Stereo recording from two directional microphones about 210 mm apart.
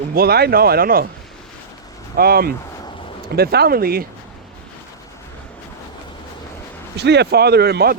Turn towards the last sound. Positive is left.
turn(degrees=-50)  # may be behind; listen again after turning